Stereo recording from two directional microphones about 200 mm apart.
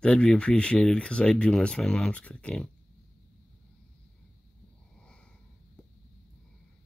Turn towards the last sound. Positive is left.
turn(degrees=5)  # may be behind; listen again after turning